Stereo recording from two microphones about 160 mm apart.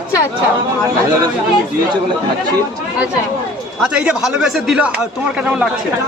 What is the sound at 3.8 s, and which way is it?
Speech, 5° right (ahead or behind).